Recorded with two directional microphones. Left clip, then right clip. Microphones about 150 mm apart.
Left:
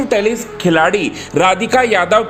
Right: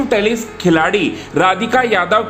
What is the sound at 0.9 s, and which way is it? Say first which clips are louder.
Speech: even; 30° left (ahead or behind).